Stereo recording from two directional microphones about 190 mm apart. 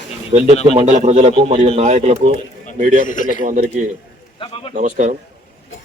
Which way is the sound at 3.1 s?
45° left (ahead or behind).